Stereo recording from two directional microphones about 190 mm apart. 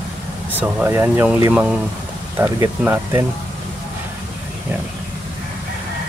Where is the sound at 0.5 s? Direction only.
10° right (ahead or behind).